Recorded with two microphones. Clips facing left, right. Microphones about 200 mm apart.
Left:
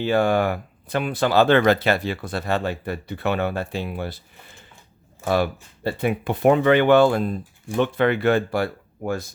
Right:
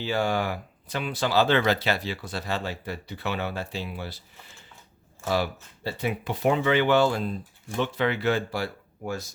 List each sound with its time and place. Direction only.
0.0 s speech: 55° left (ahead or behind)
5.2 s speech: 55° left (ahead or behind)